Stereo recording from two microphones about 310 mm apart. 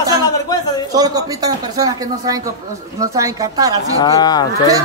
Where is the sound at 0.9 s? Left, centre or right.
Centre.